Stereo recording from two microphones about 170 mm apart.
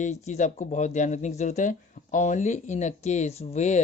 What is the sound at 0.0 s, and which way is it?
Speech, 45° left (ahead or behind).